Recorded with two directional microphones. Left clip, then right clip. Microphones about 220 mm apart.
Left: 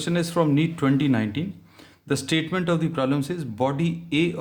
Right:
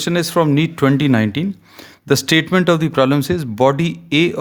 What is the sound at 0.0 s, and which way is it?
Speech, 40° right (ahead or behind).